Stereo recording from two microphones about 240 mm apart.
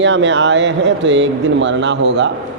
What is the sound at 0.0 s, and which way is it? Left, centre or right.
Speech, right.